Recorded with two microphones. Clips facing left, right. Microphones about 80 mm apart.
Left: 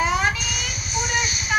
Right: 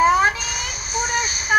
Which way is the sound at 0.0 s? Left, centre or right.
Right.